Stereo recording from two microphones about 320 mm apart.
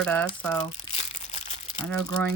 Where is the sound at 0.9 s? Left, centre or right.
Left.